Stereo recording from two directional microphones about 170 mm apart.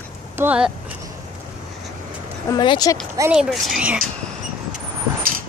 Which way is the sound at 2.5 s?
25° left (ahead or behind).